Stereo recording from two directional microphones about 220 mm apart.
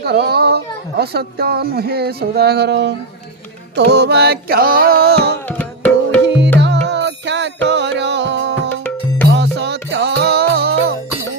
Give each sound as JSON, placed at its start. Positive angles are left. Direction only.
{"t": 0.0, "sound": "speech", "side_deg": -45}
{"t": 5.5, "sound": "music", "side_deg": 5}
{"t": 6.2, "sound": "music", "side_deg": -50}